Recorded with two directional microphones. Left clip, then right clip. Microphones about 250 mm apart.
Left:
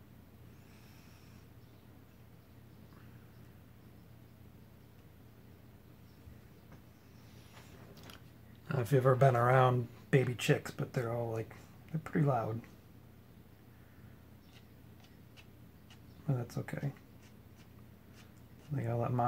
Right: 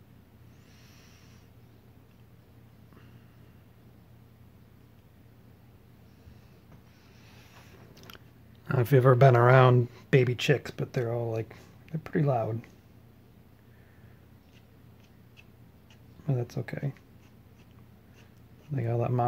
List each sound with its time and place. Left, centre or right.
8.6 s speech: right
16.3 s speech: right
18.8 s speech: right